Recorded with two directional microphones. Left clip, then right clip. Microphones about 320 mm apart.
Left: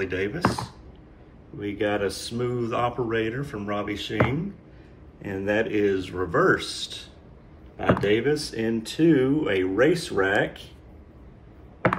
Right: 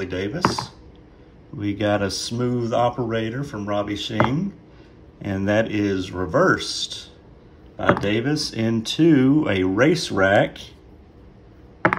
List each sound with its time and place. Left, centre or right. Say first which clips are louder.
0.0 s speech: even; centre
1.6 s speech: right 3 dB; centre
5.2 s speech: right 4 dB; centre